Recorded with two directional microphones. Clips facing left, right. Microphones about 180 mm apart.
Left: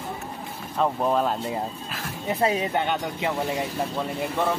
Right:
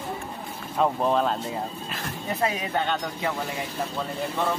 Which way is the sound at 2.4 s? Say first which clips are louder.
Left 4 dB; 30° left (ahead or behind).